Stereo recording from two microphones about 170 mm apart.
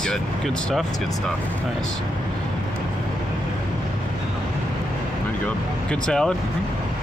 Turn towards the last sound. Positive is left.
turn(degrees=5)  # may be behind; listen again after turning